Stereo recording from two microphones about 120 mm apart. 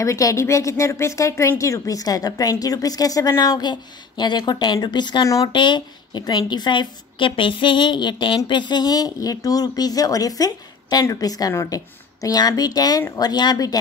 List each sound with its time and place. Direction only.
0.0 s a woman's voice: 25° left (ahead or behind)